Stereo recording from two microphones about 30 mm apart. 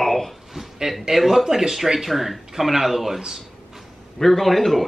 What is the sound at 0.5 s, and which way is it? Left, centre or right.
A man's voice, centre.